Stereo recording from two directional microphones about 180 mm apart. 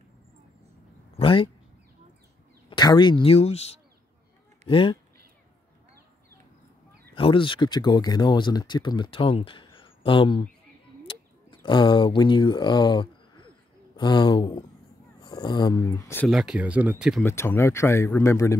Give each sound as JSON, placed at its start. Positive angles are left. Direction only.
{"t": 1.1, "sound": "speech", "side_deg": 30}
{"t": 2.7, "sound": "speech", "side_deg": 25}
{"t": 7.2, "sound": "speech", "side_deg": 30}
{"t": 11.6, "sound": "speech", "side_deg": 25}
{"t": 16.3, "sound": "speech", "side_deg": -5}
{"t": 17.2, "sound": "speech", "side_deg": 15}